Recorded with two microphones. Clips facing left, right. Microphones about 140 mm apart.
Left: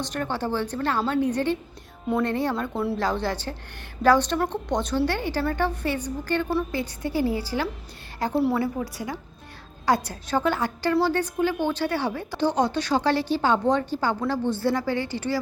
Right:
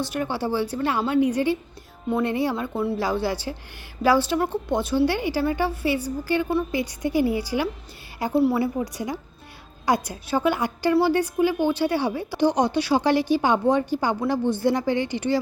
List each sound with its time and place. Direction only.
0.0 s a woman's voice: 10° right (ahead or behind)
8.2 s a woman's voice: 5° right (ahead or behind)
8.6 s a woman's voice: 15° right (ahead or behind)